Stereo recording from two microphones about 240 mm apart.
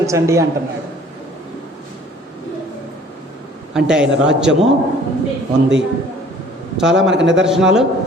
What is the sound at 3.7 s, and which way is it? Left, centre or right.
Speech, centre.